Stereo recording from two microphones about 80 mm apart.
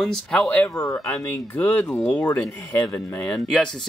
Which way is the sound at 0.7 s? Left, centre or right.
Left.